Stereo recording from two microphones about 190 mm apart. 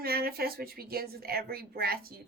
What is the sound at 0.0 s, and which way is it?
A woman's voice, 55° right (ahead or behind).